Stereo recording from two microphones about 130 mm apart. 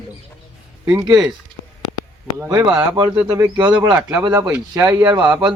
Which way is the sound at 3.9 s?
10° right (ahead or behind).